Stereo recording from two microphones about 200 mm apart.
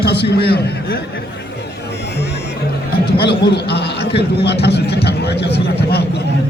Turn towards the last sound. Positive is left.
turn(degrees=55)  # may be behind; listen again after turning